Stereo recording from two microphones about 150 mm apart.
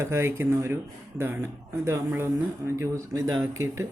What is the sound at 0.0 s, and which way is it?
Speech, 15° right (ahead or behind).